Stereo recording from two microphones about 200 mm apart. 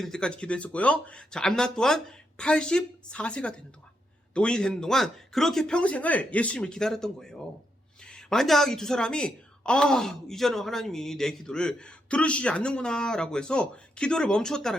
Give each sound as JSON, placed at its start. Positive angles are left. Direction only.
{"t": 0.0, "sound": "a woman's voice", "side_deg": 5}